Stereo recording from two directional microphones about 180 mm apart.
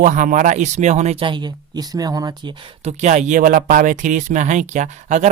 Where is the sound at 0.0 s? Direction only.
45° right (ahead or behind); by 2.5 s 20° right (ahead or behind).